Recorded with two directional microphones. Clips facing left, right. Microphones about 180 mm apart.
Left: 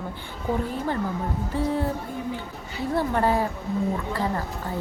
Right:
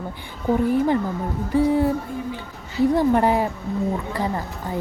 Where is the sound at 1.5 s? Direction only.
10° right (ahead or behind).